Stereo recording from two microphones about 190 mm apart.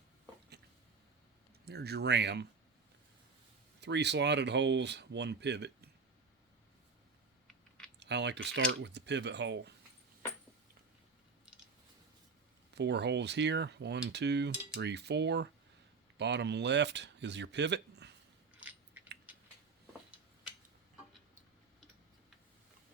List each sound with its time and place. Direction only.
1.6 s speech: 60° right (ahead or behind)
3.8 s speech: 65° right (ahead or behind)
7.9 s speech: 65° right (ahead or behind)
12.7 s speech: 65° right (ahead or behind)
18.6 s biting: 10° right (ahead or behind)